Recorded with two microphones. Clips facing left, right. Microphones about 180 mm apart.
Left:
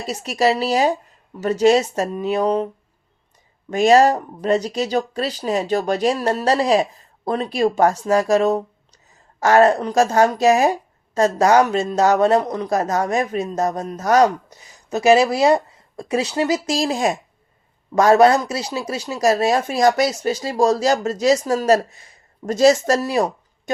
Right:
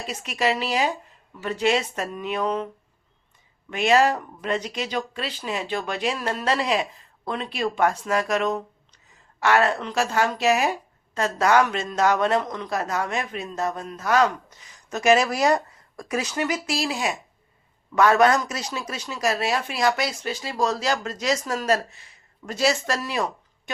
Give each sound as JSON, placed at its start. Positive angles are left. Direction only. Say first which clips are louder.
{"t": 0.0, "sound": "a woman's voice", "louder": "left 6 dB", "side_deg": 40}
{"t": 3.7, "sound": "a woman's voice", "louder": "left 6 dB", "side_deg": 40}